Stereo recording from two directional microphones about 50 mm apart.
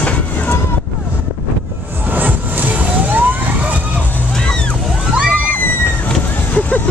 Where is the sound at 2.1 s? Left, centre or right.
Right.